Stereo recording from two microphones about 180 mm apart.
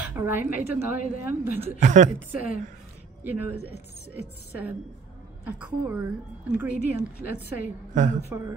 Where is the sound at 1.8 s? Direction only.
40° right (ahead or behind).